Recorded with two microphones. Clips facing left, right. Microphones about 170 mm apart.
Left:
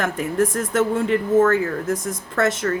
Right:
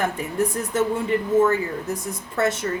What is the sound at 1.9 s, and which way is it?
Speech, 90° left.